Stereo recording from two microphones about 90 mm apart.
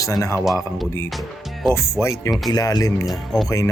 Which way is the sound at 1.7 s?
30° left (ahead or behind).